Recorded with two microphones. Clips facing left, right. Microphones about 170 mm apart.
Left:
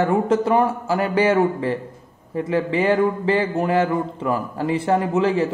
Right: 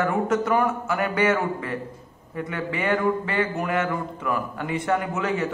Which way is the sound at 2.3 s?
30° left (ahead or behind).